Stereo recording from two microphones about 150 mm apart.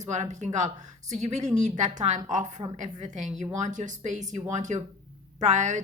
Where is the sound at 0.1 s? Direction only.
50° right (ahead or behind).